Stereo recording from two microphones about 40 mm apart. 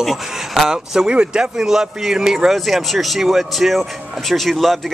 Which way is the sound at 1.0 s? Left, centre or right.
Right.